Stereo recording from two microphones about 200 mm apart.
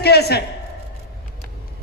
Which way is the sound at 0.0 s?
55° left (ahead or behind).